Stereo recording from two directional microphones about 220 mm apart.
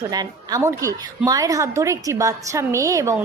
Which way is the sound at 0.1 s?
15° right (ahead or behind).